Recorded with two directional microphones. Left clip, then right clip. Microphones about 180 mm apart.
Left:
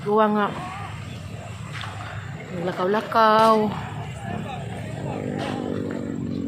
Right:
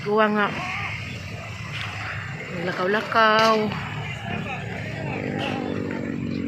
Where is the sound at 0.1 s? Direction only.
15° left (ahead or behind).